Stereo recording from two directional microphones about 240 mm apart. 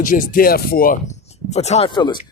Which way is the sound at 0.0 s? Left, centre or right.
Left.